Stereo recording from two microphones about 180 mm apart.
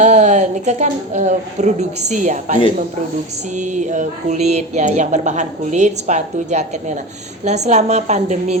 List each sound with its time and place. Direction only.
0.0 s speech: 40° right (ahead or behind)